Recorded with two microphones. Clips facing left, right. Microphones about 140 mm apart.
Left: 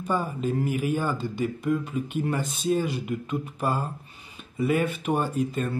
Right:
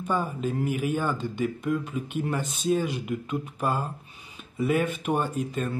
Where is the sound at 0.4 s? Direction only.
Centre (ahead or behind).